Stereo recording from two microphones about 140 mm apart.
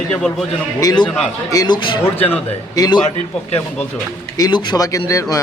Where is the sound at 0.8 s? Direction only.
25° left (ahead or behind).